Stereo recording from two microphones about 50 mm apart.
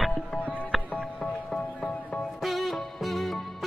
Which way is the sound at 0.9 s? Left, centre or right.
Left.